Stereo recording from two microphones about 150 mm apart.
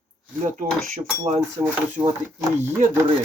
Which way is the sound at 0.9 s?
55° right (ahead or behind).